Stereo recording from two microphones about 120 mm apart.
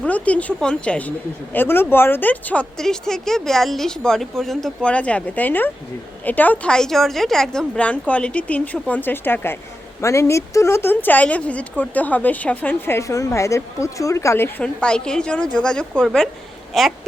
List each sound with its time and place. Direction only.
0.0 s a woman's voice: 10° left (ahead or behind)
14.6 s speech: 5° left (ahead or behind)